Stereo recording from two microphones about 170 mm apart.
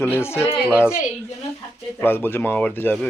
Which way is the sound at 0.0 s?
15° left (ahead or behind).